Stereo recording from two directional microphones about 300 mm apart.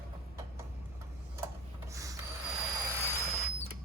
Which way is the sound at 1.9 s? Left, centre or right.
Centre.